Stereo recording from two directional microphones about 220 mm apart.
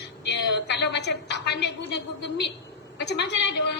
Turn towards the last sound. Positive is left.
turn(degrees=50)  # may be behind; listen again after turning